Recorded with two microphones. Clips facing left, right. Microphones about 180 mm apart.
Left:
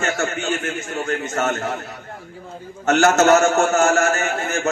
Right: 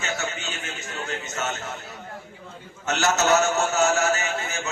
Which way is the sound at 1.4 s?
55° left (ahead or behind).